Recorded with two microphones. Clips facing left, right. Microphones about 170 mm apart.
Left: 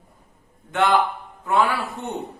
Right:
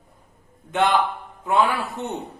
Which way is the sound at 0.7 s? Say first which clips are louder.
Left 1 dB; 20° right (ahead or behind).